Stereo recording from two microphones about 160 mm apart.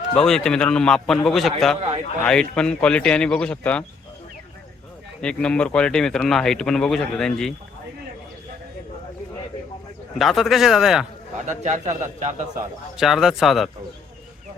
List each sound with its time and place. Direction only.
0.1 s speech: 5° left (ahead or behind)
5.2 s speech: 5° left (ahead or behind)
10.2 s speech: centre (ahead or behind)
11.4 s a man's voice: 45° right (ahead or behind)
13.0 s speech: centre (ahead or behind)